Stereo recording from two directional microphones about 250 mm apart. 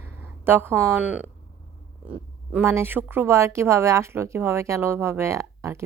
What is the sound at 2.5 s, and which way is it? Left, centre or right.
A woman's voice, centre.